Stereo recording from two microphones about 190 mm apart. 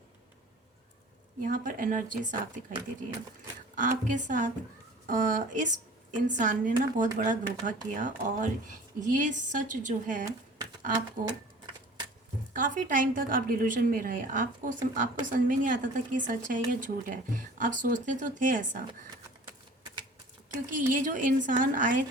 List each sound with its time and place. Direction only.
1.4 s a woman's voice: 45° right (ahead or behind)
3.8 s a woman's voice: 45° right (ahead or behind)
10.9 s speech: 20° right (ahead or behind)
12.5 s a woman's voice: 45° right (ahead or behind)
20.7 s a woman's voice: 45° right (ahead or behind)